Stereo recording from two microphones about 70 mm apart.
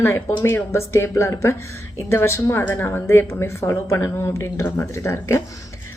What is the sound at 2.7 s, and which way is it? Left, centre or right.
A woman's voice, left.